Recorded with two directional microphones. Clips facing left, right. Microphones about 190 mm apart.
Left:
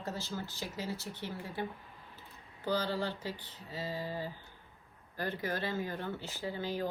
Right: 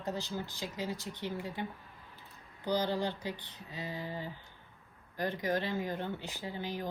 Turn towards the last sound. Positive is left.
turn(degrees=-15)  # may be behind; listen again after turning